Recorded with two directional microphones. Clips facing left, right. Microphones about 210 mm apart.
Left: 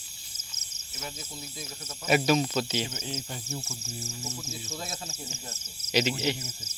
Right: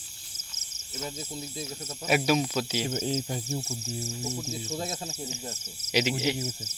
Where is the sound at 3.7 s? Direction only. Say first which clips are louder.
Right 5 dB; 35° right (ahead or behind).